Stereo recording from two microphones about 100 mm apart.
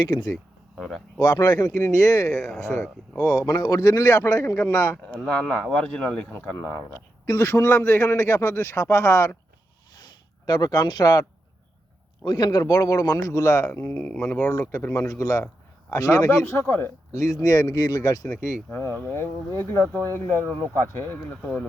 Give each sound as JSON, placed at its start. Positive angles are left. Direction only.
{"t": 0.0, "sound": "speech", "side_deg": 45}
{"t": 0.8, "sound": "speech", "side_deg": 0}
{"t": 1.2, "sound": "a man's voice", "side_deg": 40}
{"t": 5.0, "sound": "a man's voice", "side_deg": 10}
{"t": 10.4, "sound": "a man's voice", "side_deg": 45}
{"t": 13.7, "sound": "a man's voice", "side_deg": 20}
{"t": 16.6, "sound": "a man's voice", "side_deg": 25}
{"t": 17.5, "sound": "a man's voice", "side_deg": 35}
{"t": 18.7, "sound": "a man's voice", "side_deg": 20}